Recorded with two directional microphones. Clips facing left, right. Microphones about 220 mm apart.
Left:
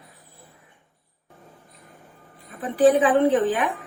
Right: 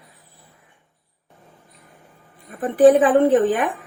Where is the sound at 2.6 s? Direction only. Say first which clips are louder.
Right 5 dB; 50° right (ahead or behind).